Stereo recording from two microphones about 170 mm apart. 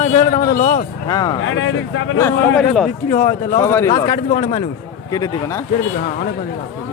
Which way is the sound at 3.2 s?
55° left (ahead or behind).